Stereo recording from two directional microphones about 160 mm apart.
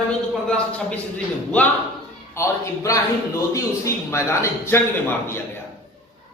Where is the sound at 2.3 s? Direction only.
20° left (ahead or behind).